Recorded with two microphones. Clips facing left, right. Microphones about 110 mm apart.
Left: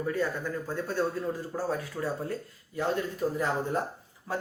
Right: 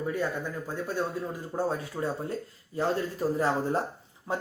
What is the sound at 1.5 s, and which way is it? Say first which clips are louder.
Speech: right 2 dB; 25° right (ahead or behind).